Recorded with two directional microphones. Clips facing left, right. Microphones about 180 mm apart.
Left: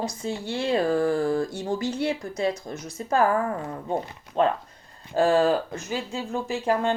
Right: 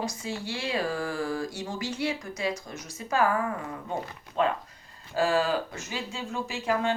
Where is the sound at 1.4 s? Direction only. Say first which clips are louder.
Left 6 dB; 55° left (ahead or behind).